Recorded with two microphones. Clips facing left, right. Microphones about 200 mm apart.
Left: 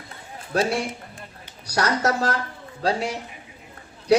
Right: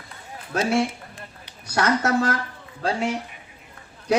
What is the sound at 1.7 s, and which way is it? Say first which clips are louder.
Speech: right 1 dB; 40° left (ahead or behind).